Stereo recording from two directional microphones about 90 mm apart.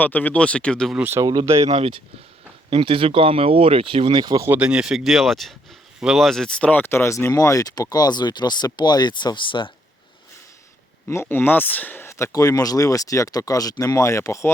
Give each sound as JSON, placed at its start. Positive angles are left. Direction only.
{"t": 0.0, "sound": "speech", "side_deg": 20}
{"t": 0.9, "sound": "speech", "side_deg": -20}
{"t": 1.2, "sound": "speech", "side_deg": -50}
{"t": 2.6, "sound": "speech", "side_deg": -80}
{"t": 4.6, "sound": "speech", "side_deg": -10}
{"t": 6.8, "sound": "speech", "side_deg": 30}
{"t": 11.1, "sound": "speech", "side_deg": 25}